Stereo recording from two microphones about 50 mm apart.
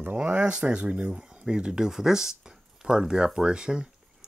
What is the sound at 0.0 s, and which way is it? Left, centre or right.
Speech, right.